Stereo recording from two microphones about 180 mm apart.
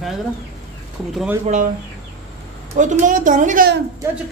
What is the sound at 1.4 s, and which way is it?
Speech, 45° right (ahead or behind).